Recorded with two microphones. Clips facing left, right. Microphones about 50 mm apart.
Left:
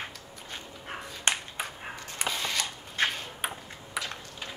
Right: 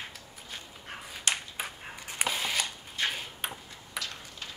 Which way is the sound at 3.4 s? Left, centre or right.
Centre.